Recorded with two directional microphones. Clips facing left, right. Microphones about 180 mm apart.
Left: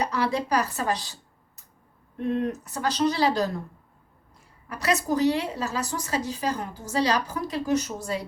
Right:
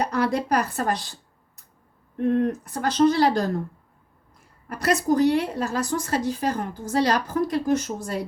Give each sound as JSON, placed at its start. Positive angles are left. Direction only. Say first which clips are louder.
{"t": 0.0, "sound": "a woman's voice", "louder": "right 2 dB", "side_deg": -55}
{"t": 2.1, "sound": "a woman's voice", "louder": "right 5 dB", "side_deg": -50}
{"t": 4.7, "sound": "a woman's voice", "louder": "right 3 dB", "side_deg": -55}